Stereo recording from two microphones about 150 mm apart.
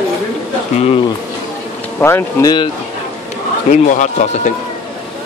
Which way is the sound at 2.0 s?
15° left (ahead or behind).